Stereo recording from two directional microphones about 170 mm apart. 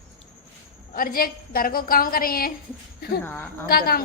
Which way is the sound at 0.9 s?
55° left (ahead or behind).